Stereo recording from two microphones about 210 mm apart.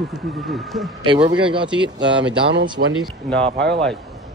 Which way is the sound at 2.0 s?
60° right (ahead or behind).